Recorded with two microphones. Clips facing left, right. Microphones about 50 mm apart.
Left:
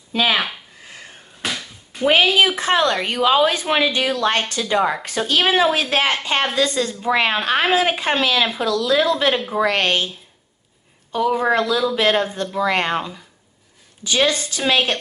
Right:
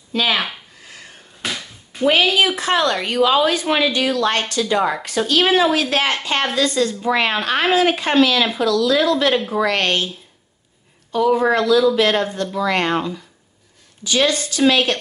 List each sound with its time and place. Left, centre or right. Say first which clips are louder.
0.1 s speech: left 1 dB; centre
1.4 s a sound: even; centre
2.0 s a woman's voice: even; left
9.1 s a woman's voice: right 2 dB; centre
11.2 s a woman's voice: right 3 dB; centre